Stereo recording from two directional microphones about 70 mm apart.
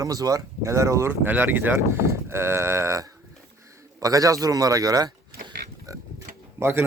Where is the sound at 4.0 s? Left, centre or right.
Right.